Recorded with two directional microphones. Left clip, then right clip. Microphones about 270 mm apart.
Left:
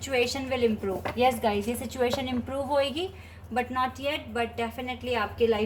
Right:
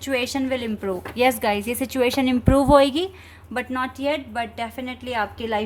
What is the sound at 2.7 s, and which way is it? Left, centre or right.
A woman's voice, right.